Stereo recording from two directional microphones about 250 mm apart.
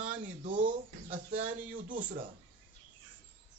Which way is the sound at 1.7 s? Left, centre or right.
Right.